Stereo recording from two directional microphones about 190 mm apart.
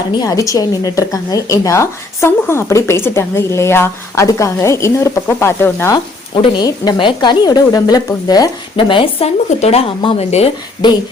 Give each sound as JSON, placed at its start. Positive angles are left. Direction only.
{"t": 0.2, "sound": "a woman's voice", "side_deg": 15}
{"t": 6.3, "sound": "speech", "side_deg": 25}